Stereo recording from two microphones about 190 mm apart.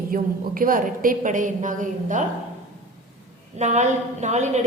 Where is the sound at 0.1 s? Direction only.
50° right (ahead or behind).